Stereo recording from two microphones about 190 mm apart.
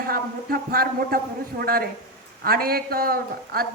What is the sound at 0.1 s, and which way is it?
A man's voice, 50° right (ahead or behind).